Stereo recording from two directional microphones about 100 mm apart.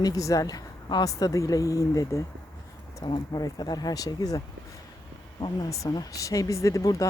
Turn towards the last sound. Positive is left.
turn(degrees=35)  # may be behind; listen again after turning